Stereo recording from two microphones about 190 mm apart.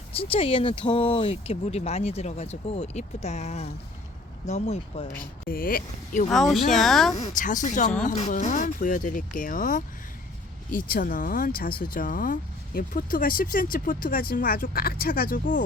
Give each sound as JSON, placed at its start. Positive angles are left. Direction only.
{"t": 0.2, "sound": "speech", "side_deg": 30}
{"t": 5.5, "sound": "speech", "side_deg": 50}
{"t": 6.2, "sound": "speech", "side_deg": 0}
{"t": 7.2, "sound": "speech", "side_deg": 45}